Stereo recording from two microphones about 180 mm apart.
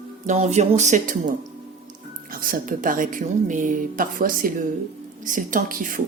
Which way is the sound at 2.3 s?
50° right (ahead or behind).